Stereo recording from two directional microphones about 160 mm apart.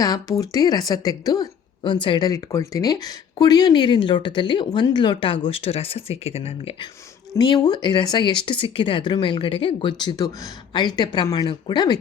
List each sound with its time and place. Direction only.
0.0 s a woman's voice: 20° left (ahead or behind); by 6.7 s 40° left (ahead or behind)
7.3 s a woman's voice: 30° left (ahead or behind)